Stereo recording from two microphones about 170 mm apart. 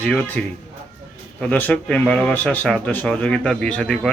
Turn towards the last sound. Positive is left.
turn(degrees=5)  # may be behind; listen again after turning